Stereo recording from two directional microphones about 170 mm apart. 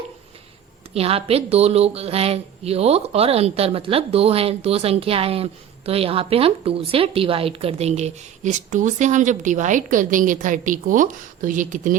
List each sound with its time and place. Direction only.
0.9 s speech: 35° right (ahead or behind)